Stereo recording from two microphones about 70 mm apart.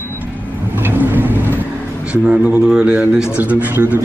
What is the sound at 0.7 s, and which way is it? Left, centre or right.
Vehicle, right.